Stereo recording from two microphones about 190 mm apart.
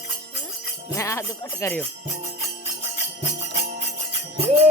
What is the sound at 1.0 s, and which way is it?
Speech, 15° left (ahead or behind).